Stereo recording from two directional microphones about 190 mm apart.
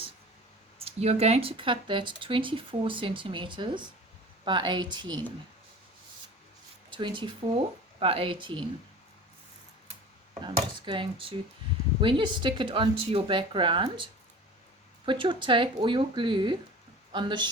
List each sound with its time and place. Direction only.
0.8 s speech: 30° right (ahead or behind)
6.9 s speech: 25° right (ahead or behind)
10.4 s speech: 25° right (ahead or behind)